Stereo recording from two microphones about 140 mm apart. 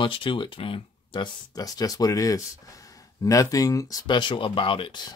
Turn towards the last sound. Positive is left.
turn(degrees=35)  # may be behind; listen again after turning